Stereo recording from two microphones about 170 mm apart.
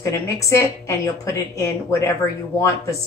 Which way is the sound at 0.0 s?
15° left (ahead or behind).